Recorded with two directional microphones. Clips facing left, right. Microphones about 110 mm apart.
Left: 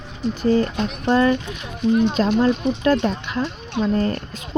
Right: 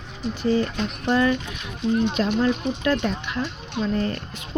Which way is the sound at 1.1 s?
35° left (ahead or behind).